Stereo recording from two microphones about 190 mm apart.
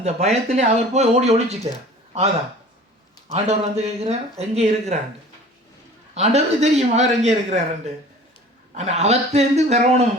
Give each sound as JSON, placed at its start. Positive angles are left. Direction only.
{"t": 0.0, "sound": "speech", "side_deg": -35}
{"t": 3.3, "sound": "speech", "side_deg": -35}
{"t": 6.1, "sound": "speech", "side_deg": -35}
{"t": 8.7, "sound": "speech", "side_deg": -35}